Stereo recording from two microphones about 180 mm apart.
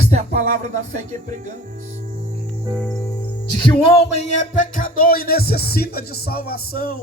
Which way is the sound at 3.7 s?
30° left (ahead or behind).